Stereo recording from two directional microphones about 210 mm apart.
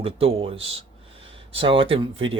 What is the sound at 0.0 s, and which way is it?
Speech, 25° right (ahead or behind).